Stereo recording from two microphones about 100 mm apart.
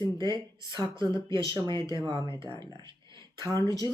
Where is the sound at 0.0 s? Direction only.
45° right (ahead or behind).